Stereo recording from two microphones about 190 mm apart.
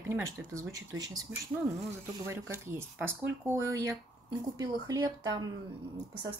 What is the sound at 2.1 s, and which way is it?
A woman's voice, 15° right (ahead or behind).